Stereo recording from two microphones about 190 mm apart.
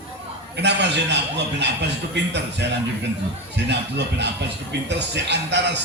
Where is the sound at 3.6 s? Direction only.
65° right (ahead or behind).